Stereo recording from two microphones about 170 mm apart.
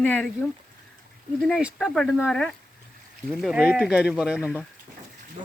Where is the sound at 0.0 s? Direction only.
10° left (ahead or behind).